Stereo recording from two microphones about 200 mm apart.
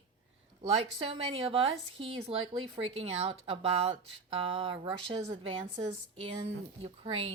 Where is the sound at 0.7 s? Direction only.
30° right (ahead or behind).